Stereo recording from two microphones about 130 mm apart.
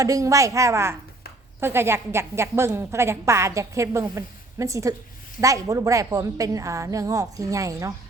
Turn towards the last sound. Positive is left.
turn(degrees=-25)  # may be behind; listen again after turning